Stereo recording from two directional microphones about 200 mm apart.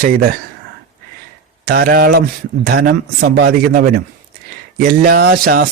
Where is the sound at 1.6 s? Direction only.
45° right (ahead or behind).